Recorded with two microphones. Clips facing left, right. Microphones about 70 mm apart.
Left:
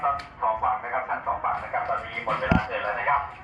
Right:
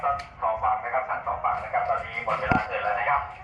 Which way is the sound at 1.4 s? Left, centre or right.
Centre.